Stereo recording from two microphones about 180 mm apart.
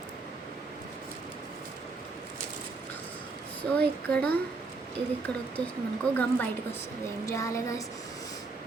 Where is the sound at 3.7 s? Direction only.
5° left (ahead or behind).